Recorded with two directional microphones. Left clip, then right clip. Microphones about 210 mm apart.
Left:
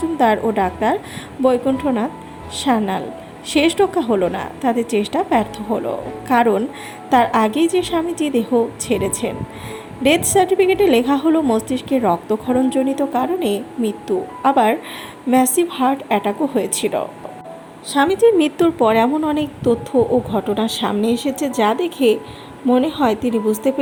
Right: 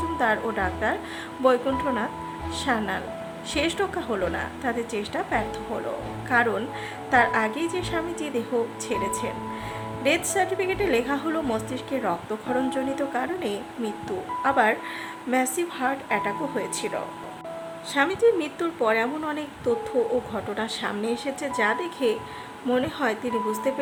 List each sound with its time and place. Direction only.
0.2 s a woman's voice: 20° left (ahead or behind)
18.2 s a woman's voice: 30° left (ahead or behind)